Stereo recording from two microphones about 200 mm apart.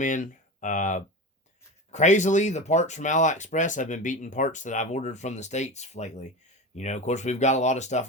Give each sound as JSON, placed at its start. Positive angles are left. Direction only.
{"t": 0.0, "sound": "speech", "side_deg": 40}